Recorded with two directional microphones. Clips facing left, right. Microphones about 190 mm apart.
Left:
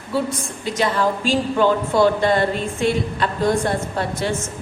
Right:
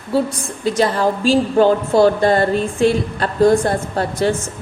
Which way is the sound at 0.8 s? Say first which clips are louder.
Right 3 dB; 35° right (ahead or behind).